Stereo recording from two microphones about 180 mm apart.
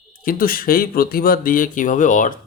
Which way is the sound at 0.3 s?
55° left (ahead or behind).